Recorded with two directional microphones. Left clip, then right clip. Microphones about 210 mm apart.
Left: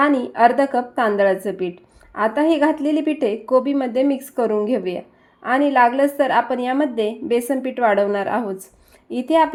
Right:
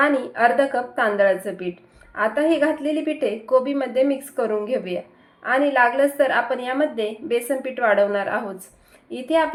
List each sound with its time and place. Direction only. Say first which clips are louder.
0.0 s a woman's voice: left 3 dB; 45° left (ahead or behind)